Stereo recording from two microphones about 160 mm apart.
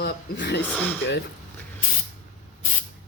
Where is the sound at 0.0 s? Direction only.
90° left.